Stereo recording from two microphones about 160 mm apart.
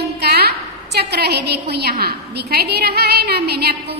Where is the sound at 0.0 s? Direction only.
75° right (ahead or behind).